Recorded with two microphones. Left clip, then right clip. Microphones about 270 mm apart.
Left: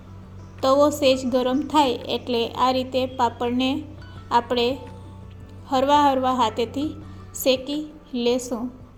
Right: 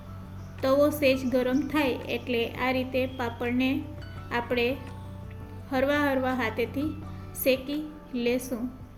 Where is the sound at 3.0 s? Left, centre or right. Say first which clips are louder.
Left 7 dB; centre.